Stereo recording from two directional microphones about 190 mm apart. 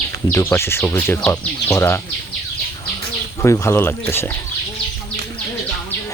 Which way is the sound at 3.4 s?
15° left (ahead or behind).